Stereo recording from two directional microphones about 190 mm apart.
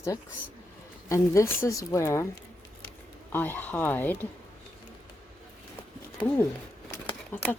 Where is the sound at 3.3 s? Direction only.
10° left (ahead or behind).